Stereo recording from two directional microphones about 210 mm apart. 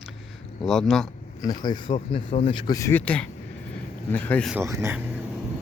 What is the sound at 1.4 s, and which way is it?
Speech, 20° left (ahead or behind).